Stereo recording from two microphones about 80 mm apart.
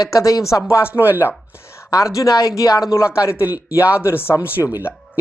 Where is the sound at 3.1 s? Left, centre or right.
Left.